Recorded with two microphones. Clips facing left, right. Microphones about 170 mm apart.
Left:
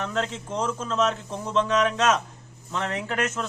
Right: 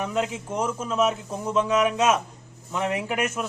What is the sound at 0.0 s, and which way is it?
Speech, 10° right (ahead or behind).